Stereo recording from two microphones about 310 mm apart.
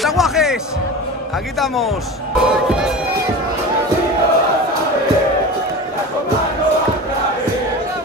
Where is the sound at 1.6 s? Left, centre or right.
Centre.